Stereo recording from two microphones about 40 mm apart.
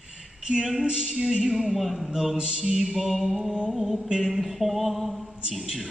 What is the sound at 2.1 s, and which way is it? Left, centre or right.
Speech, right.